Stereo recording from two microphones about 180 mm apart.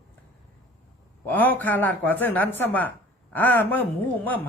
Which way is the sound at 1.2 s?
10° left (ahead or behind).